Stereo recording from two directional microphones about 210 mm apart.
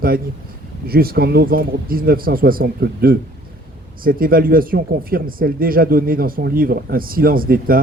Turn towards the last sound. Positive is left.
turn(degrees=-45)  # may be behind; listen again after turning